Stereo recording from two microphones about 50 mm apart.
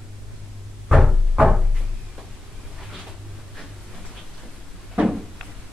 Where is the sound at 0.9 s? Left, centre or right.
Centre.